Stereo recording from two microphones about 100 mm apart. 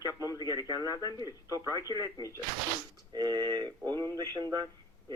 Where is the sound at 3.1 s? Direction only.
45° right (ahead or behind).